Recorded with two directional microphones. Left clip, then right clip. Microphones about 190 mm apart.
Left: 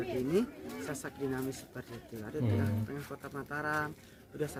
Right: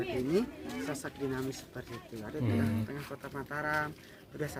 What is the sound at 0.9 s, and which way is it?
Speech, 15° left (ahead or behind).